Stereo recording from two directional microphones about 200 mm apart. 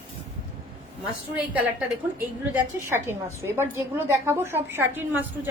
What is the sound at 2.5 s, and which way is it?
A woman's voice, 10° right (ahead or behind).